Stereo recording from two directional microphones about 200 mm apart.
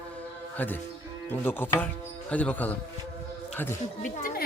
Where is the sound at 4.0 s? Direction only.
45° left (ahead or behind).